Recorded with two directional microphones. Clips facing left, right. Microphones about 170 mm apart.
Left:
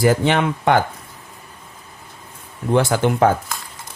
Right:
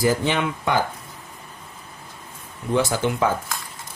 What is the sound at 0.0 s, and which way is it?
Speech, 60° left (ahead or behind).